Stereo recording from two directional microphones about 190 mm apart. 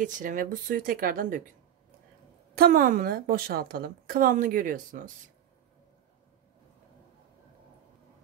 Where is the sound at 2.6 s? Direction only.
50° right (ahead or behind).